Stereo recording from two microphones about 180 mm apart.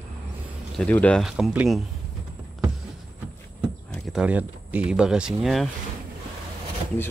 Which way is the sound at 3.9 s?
Centre (ahead or behind).